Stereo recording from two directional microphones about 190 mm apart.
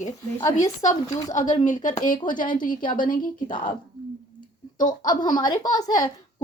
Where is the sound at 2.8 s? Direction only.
25° left (ahead or behind).